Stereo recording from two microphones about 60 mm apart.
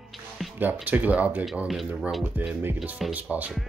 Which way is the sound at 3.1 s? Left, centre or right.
Right.